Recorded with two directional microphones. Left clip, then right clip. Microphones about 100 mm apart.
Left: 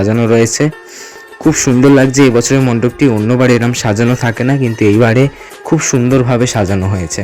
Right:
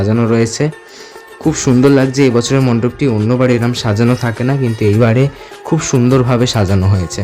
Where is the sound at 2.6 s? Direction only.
25° left (ahead or behind).